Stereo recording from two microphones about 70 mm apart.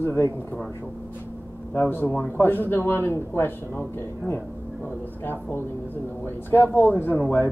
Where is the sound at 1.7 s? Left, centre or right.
Left.